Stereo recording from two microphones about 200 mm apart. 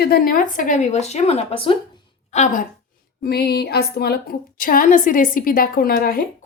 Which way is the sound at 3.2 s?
50° left (ahead or behind).